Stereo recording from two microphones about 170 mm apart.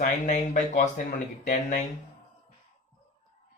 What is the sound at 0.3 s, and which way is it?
Speech, 45° left (ahead or behind).